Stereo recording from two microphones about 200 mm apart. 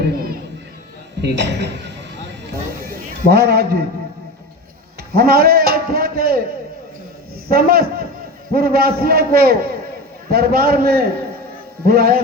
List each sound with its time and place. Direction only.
0.0 s crowd: 50° right (ahead or behind)
1.2 s a man's voice: 60° right (ahead or behind)
3.2 s a man's voice: 50° right (ahead or behind)
5.1 s a man's voice: 50° right (ahead or behind)
7.5 s a man's voice: 50° right (ahead or behind)